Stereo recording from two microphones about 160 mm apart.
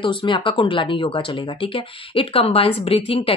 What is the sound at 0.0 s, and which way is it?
Speech, 30° left (ahead or behind).